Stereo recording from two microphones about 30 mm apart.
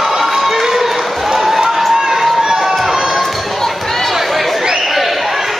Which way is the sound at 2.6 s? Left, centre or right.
Centre.